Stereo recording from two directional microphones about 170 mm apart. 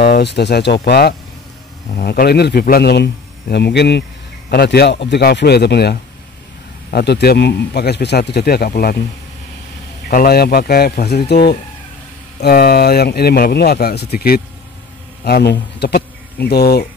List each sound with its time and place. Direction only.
0.0 s speech: 70° left (ahead or behind)
0.8 s speech: 70° left (ahead or behind)
4.5 s speech: 70° left (ahead or behind)
10.2 s speech: 70° left (ahead or behind)
12.4 s speech: 65° left (ahead or behind)